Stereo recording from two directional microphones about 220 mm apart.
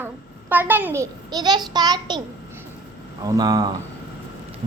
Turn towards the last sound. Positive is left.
turn(degrees=-15)  # may be behind; listen again after turning